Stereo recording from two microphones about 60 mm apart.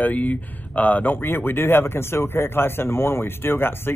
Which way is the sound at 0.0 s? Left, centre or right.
Left.